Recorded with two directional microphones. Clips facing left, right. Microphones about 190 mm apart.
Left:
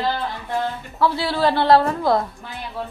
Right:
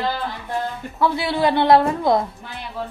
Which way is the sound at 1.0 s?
20° right (ahead or behind).